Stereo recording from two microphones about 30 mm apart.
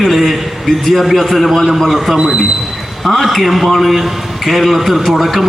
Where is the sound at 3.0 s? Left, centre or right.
Centre.